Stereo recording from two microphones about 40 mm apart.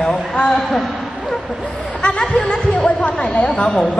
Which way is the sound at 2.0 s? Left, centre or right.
Left.